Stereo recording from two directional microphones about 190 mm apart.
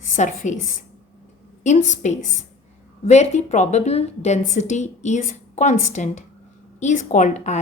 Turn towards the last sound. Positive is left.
turn(degrees=35)  # may be behind; listen again after turning